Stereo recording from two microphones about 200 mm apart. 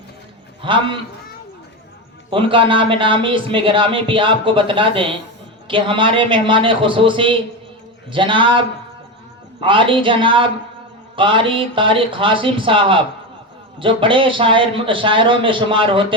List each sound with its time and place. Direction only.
0.6 s speech: 25° right (ahead or behind)
2.3 s speech: 25° right (ahead or behind)